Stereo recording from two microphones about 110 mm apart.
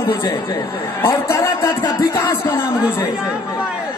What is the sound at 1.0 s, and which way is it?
Speech, 25° left (ahead or behind).